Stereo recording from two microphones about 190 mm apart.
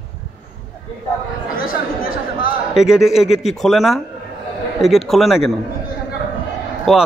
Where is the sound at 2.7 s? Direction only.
Centre (ahead or behind).